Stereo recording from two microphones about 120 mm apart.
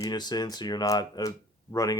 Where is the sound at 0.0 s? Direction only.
35° left (ahead or behind).